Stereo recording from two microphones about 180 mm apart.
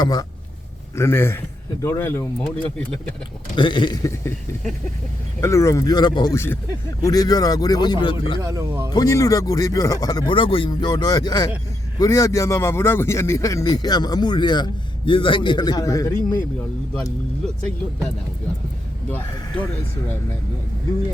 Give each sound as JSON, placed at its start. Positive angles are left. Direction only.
{"t": 0.0, "sound": "a man's voice", "side_deg": 20}
{"t": 3.5, "sound": "a man's voice", "side_deg": 25}
{"t": 5.4, "sound": "a man's voice", "side_deg": 15}
{"t": 8.4, "sound": "speech", "side_deg": -15}
{"t": 8.9, "sound": "a man's voice", "side_deg": 20}